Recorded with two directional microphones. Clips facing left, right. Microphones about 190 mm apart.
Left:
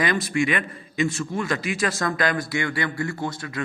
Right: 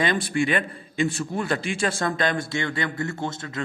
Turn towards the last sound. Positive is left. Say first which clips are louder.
# left 1 dB
turn(degrees=-25)  # may be behind; listen again after turning